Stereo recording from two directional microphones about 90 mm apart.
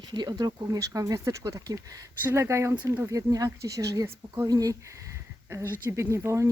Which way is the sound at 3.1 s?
40° right (ahead or behind).